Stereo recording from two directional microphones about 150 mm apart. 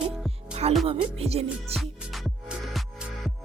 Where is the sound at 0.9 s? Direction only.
40° right (ahead or behind).